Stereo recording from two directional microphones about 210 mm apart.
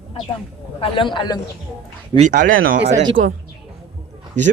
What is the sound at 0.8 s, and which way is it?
Speech, 25° left (ahead or behind).